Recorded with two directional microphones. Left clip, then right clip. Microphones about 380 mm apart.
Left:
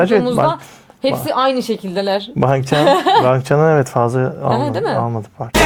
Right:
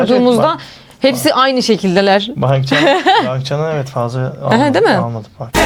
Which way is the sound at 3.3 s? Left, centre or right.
Left.